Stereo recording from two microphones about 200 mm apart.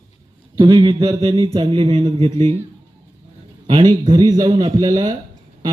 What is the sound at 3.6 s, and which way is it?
Speech, 25° right (ahead or behind).